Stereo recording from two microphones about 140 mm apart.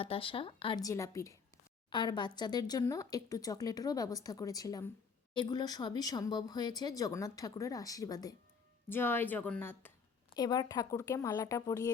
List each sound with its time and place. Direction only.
0.0 s speech: 40° left (ahead or behind)
0.8 s speech: 25° left (ahead or behind)
1.9 s speech: 35° left (ahead or behind)
8.9 s speech: 15° left (ahead or behind)
10.3 s speech: 30° left (ahead or behind)